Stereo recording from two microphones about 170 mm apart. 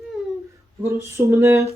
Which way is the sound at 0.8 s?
15° right (ahead or behind).